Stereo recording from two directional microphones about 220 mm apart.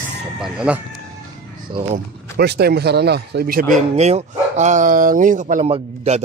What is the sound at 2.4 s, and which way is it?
Speech, 45° right (ahead or behind).